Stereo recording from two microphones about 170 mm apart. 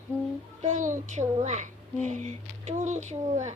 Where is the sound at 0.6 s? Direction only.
45° right (ahead or behind).